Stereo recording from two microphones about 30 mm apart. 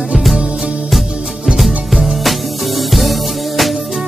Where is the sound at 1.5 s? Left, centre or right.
Centre.